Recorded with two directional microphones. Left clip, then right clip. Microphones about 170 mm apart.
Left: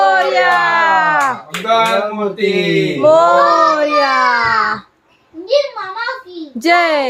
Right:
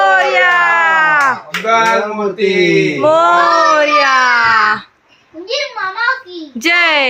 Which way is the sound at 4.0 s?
20° left (ahead or behind).